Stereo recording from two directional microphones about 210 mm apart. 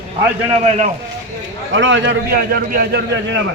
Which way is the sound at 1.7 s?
60° right (ahead or behind).